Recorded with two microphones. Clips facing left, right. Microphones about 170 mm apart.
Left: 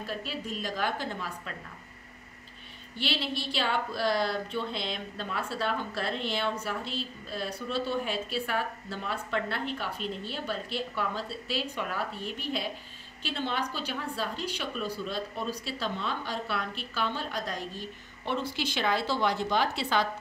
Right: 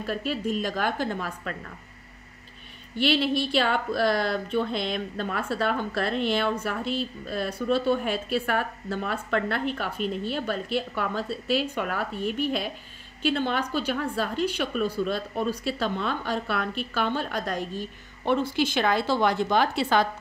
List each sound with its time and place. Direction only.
0.0 s a woman's voice: 55° right (ahead or behind)
3.0 s a woman's voice: 60° right (ahead or behind)